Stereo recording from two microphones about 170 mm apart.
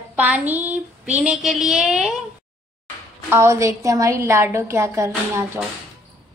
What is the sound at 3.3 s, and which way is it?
A woman's voice, 15° right (ahead or behind).